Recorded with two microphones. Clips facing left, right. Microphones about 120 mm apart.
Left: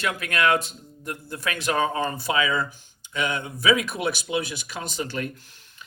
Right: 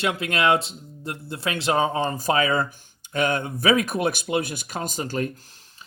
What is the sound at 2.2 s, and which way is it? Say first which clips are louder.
Speech: right 4 dB; 45° right (ahead or behind).